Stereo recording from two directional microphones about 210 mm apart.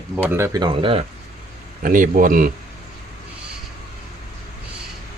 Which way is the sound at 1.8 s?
40° right (ahead or behind).